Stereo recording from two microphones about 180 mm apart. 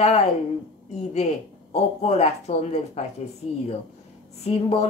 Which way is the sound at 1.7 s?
35° left (ahead or behind).